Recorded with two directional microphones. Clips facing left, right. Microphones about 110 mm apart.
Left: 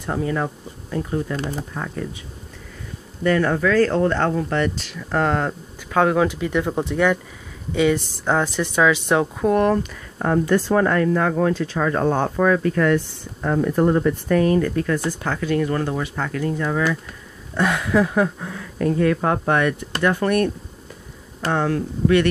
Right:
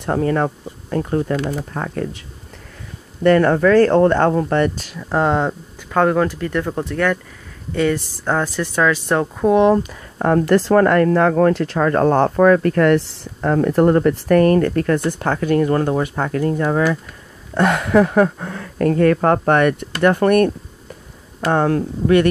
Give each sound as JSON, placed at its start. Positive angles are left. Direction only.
{"t": 0.0, "sound": "speech", "side_deg": -55}
{"t": 3.3, "sound": "speech", "side_deg": -50}
{"t": 4.9, "sound": "speech", "side_deg": -25}
{"t": 5.9, "sound": "speech", "side_deg": 0}
{"t": 7.9, "sound": "speech", "side_deg": -5}
{"t": 8.5, "sound": "speech", "side_deg": 20}
{"t": 9.1, "sound": "speech", "side_deg": 0}
{"t": 10.1, "sound": "speech", "side_deg": -55}
{"t": 10.4, "sound": "speech", "side_deg": -85}
{"t": 13.5, "sound": "speech", "side_deg": -65}
{"t": 17.6, "sound": "speech", "side_deg": -55}